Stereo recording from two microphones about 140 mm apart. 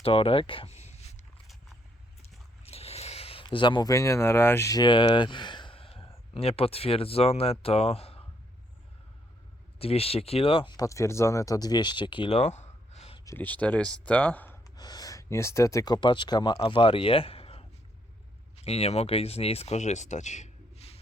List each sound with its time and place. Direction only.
0.0 s speech: 40° left (ahead or behind)
2.6 s speech: 45° left (ahead or behind)
9.7 s speech: 45° left (ahead or behind)
10.8 s speech: 20° left (ahead or behind)
12.4 s a sound: 55° left (ahead or behind)
13.3 s speech: 10° left (ahead or behind)
14.8 s speech: 30° left (ahead or behind); by 21.0 s 45° left (ahead or behind)